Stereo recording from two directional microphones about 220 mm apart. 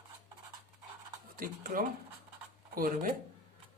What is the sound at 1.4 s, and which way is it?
Speech, 40° right (ahead or behind).